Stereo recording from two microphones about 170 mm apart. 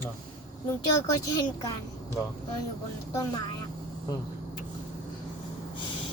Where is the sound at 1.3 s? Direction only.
20° left (ahead or behind).